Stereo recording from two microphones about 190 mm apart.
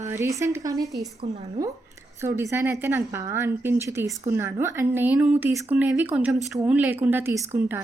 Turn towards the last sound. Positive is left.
turn(degrees=-10)  # may be behind; listen again after turning